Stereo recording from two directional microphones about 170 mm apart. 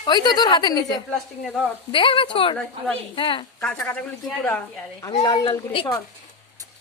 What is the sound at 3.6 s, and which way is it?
Speech, 5° left (ahead or behind).